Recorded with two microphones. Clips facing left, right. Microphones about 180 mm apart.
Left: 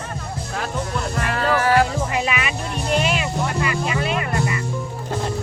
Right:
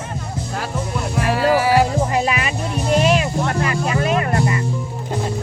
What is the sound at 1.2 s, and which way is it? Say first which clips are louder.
Music: right 5 dB; 10° right (ahead or behind).